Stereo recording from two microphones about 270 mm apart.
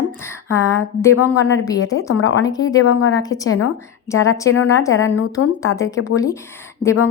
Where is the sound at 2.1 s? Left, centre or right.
Left.